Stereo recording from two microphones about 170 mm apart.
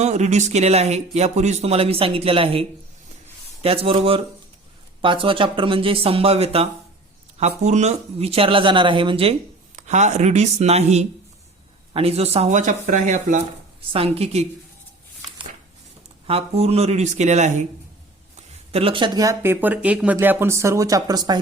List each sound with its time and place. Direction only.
0.0 s speech: 40° right (ahead or behind)
9.7 s speech: 45° right (ahead or behind)
13.9 s speech: 35° right (ahead or behind)
16.2 s speech: 35° right (ahead or behind)